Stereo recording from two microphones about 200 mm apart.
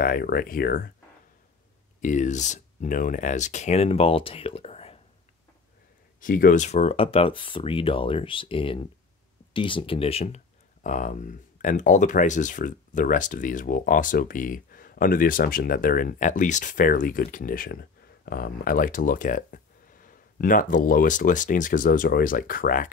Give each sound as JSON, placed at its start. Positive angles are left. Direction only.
{"t": 0.0, "sound": "speech", "side_deg": 50}
{"t": 2.0, "sound": "speech", "side_deg": 40}
{"t": 6.2, "sound": "speech", "side_deg": 40}